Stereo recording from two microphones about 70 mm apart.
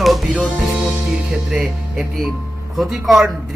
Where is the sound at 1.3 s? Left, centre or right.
Centre.